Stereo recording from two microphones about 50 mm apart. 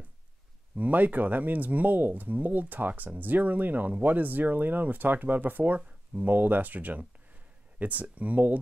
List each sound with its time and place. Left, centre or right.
0.7 s speech: right